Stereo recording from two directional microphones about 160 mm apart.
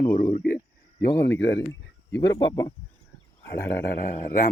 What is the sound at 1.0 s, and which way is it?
Speech, 15° left (ahead or behind).